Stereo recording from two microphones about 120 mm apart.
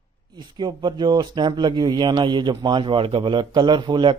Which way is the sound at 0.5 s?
40° right (ahead or behind).